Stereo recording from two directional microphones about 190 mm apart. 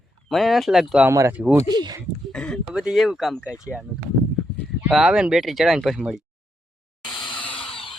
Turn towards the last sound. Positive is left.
turn(degrees=5)  # may be behind; listen again after turning